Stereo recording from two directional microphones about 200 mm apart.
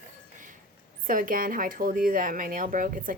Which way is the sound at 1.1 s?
45° right (ahead or behind).